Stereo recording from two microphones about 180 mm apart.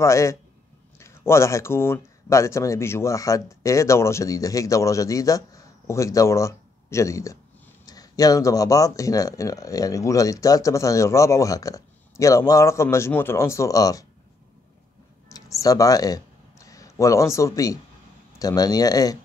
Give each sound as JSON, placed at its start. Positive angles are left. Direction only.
{"t": 0.0, "sound": "speech", "side_deg": 15}
{"t": 15.2, "sound": "a sound", "side_deg": 20}
{"t": 18.4, "sound": "speech", "side_deg": 20}